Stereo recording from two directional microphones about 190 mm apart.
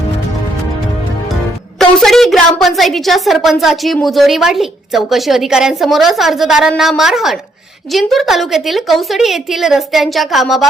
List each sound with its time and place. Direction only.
1.8 s a woman's voice: centre (ahead or behind)